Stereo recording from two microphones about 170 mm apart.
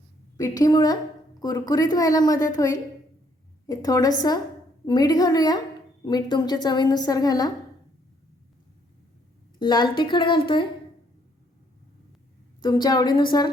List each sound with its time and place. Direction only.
0.3 s a woman's voice: 20° left (ahead or behind)
9.6 s a woman's voice: 25° left (ahead or behind)
12.6 s a woman's voice: 25° left (ahead or behind)